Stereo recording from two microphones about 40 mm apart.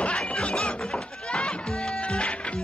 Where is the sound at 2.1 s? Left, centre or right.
Left.